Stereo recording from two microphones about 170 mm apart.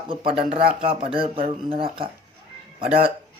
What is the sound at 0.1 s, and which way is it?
Speech, 30° right (ahead or behind).